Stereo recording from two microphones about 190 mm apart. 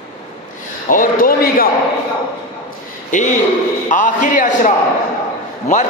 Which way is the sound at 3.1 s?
40° left (ahead or behind).